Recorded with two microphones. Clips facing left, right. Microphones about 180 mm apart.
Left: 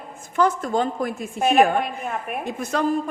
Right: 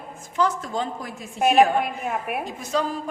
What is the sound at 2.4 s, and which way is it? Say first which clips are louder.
Speech: left 1 dB; 55° left (ahead or behind).